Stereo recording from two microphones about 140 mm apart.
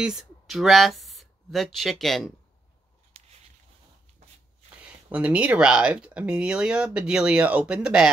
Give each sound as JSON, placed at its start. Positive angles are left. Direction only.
{"t": 0.0, "sound": "speech", "side_deg": 0}
{"t": 3.1, "sound": "a sound", "side_deg": -45}
{"t": 4.8, "sound": "speech", "side_deg": -10}